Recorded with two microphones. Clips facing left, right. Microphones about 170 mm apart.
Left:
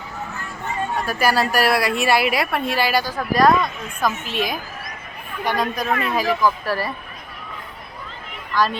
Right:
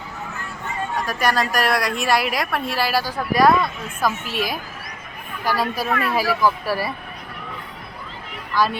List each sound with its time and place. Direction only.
1.0 s a woman's voice: 5° left (ahead or behind)
5.9 s speech: 20° left (ahead or behind)
6.4 s speech: 10° right (ahead or behind)
8.5 s speech: 10° right (ahead or behind)